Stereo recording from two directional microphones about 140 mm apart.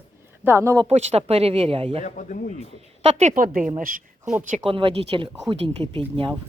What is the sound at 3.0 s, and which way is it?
A woman's voice, 60° right (ahead or behind).